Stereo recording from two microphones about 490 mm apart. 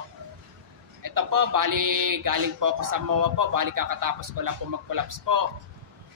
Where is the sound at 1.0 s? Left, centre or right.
Right.